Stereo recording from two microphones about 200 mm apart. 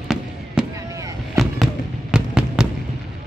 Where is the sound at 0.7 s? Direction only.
15° right (ahead or behind).